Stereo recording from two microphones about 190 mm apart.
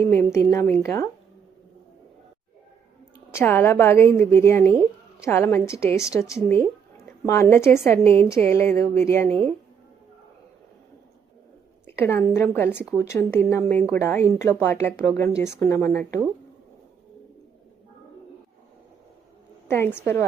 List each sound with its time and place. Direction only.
0.0 s a woman's voice: 15° left (ahead or behind)
3.3 s a woman's voice: 10° left (ahead or behind)
11.9 s a woman's voice: 10° left (ahead or behind)
19.6 s a woman's voice: 10° left (ahead or behind)